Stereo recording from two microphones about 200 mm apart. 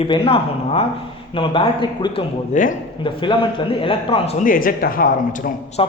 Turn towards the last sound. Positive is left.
turn(degrees=25)  # may be behind; listen again after turning